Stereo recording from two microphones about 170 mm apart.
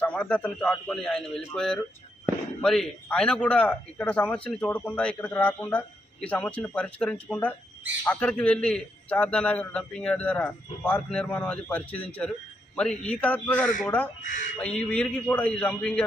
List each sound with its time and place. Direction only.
0.0 s a man's voice: 5° left (ahead or behind)
14.2 s speech: 50° left (ahead or behind)
14.6 s a man's voice: 5° left (ahead or behind)